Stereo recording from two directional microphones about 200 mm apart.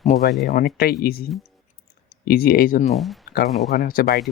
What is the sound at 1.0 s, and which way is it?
Speech, 50° left (ahead or behind).